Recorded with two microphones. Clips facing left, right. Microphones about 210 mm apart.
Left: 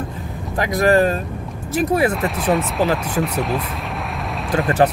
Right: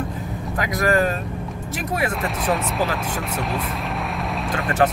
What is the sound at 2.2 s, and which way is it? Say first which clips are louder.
Speech: left 4 dB; centre (ahead or behind).